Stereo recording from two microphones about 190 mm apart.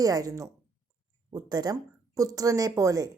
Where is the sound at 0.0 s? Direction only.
20° right (ahead or behind).